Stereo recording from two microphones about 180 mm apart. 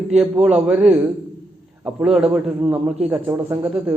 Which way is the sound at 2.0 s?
5° right (ahead or behind).